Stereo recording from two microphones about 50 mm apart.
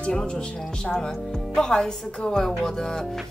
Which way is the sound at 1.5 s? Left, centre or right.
Centre.